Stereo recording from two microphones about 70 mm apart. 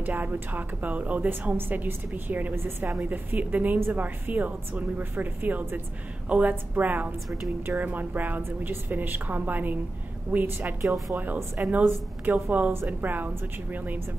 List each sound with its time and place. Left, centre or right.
0.0 s a woman's voice: right
10.8 s a woman's voice: right
11.7 s a woman's voice: right